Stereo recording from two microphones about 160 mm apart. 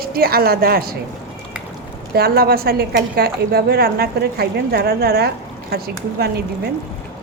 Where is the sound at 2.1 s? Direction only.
75° right (ahead or behind).